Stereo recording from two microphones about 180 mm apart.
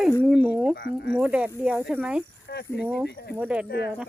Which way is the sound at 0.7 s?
65° left (ahead or behind).